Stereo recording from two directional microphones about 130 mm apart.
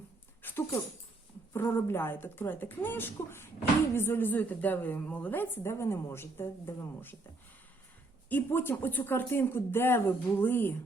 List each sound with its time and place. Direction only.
0.4 s dog: 20° left (ahead or behind)
1.5 s speech: 15° left (ahead or behind)
8.3 s speech: 15° left (ahead or behind)